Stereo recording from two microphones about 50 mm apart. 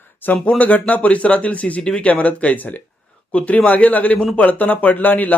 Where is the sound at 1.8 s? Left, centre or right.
Centre.